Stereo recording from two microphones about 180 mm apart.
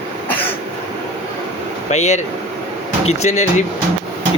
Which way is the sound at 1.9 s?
40° left (ahead or behind).